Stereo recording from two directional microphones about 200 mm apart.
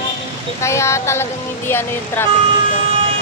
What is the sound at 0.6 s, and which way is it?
Speech, 15° left (ahead or behind).